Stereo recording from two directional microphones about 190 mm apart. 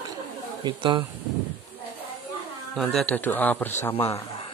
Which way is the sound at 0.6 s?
25° right (ahead or behind).